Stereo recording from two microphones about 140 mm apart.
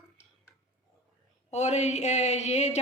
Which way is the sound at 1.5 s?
55° left (ahead or behind).